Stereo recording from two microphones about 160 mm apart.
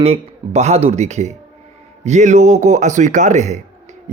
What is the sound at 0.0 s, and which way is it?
Speech, 40° right (ahead or behind).